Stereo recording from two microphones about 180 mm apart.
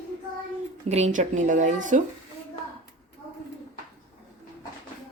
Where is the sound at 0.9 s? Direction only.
40° right (ahead or behind).